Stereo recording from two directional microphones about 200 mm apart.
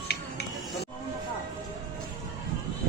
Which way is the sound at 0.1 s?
55° left (ahead or behind).